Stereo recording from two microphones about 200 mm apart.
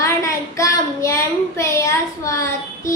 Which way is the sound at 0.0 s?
15° left (ahead or behind).